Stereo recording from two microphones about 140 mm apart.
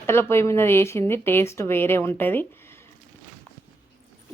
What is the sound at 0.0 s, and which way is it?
Speech, 20° left (ahead or behind).